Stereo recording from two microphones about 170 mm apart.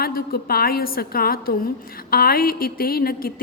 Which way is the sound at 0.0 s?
65° left (ahead or behind).